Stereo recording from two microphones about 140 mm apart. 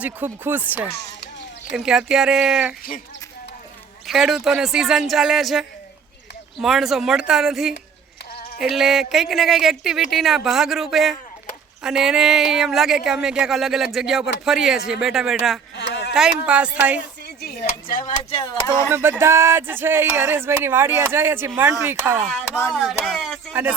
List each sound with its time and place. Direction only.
0.0 s speech: 15° right (ahead or behind)
4.0 s speech: centre (ahead or behind)
8.3 s clip-clop: 90° left
8.5 s speech: centre (ahead or behind)
17.4 s speech: 90° left
18.2 s speech: 45° left (ahead or behind)
18.4 s speech: 25° left (ahead or behind)
18.9 s speech: 15° right (ahead or behind)
22.3 s a sound: centre (ahead or behind)